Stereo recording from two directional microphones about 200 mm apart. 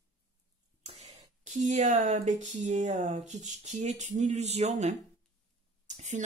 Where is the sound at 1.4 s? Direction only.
40° right (ahead or behind).